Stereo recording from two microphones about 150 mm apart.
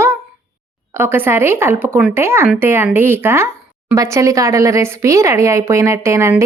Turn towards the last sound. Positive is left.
turn(degrees=-20)  # may be behind; listen again after turning